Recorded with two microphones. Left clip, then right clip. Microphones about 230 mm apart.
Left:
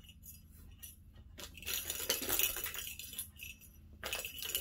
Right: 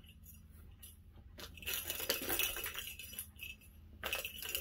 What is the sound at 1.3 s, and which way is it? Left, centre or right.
Chink, centre.